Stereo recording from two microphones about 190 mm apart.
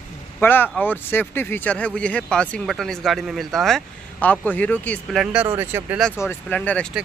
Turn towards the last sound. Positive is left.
turn(degrees=10)  # may be behind; listen again after turning